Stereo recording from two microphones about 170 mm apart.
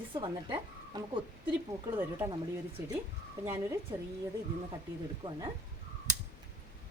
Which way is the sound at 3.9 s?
25° right (ahead or behind).